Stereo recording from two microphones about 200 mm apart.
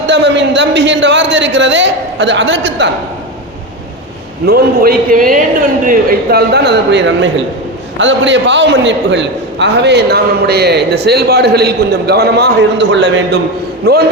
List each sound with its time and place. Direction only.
0.1 s a man's voice: 60° right (ahead or behind)
4.4 s a man's voice: 50° right (ahead or behind)
13.8 s a man's voice: 50° right (ahead or behind)